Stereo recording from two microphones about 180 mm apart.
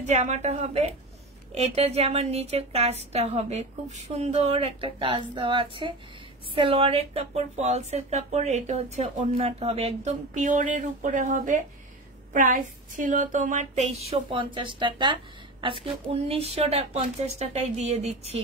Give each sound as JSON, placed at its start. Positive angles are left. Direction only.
{"t": 0.0, "sound": "speech", "side_deg": -40}